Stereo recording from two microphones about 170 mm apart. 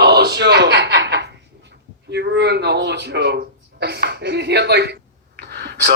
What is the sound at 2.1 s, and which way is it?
Speech, 85° right.